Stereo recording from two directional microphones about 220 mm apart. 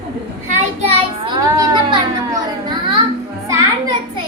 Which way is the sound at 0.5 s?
25° right (ahead or behind).